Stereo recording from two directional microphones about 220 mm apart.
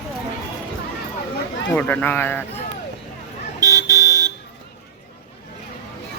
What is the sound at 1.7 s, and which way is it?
Speech, 10° left (ahead or behind).